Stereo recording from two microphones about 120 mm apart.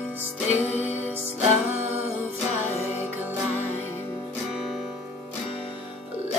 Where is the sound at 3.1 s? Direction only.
15° right (ahead or behind).